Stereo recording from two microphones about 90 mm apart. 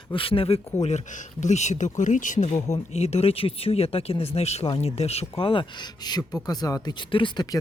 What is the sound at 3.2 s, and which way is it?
Speech, 90° left.